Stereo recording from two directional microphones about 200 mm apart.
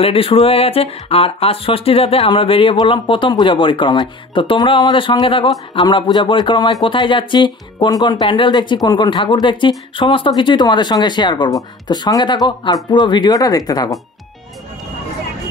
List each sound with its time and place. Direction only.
0.0 s speech: 30° left (ahead or behind)